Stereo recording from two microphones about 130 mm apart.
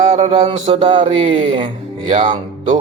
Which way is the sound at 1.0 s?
45° right (ahead or behind).